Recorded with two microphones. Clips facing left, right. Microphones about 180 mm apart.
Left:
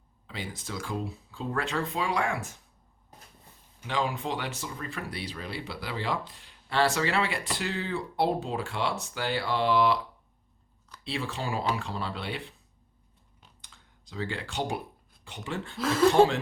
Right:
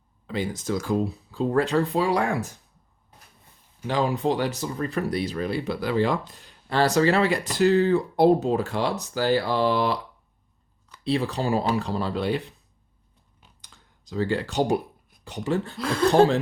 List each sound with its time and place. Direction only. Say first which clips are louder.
0.3 s speech: right 11 dB; 45° right (ahead or behind)
3.8 s speech: right 7 dB; 40° right (ahead or behind)
11.0 s speech: right 9 dB; 40° right (ahead or behind)
13.6 s computer keyboard: right 2 dB; 40° right (ahead or behind)
15.2 s speech: right 9 dB; 40° right (ahead or behind)
15.8 s speech: left 5 dB; centre (ahead or behind)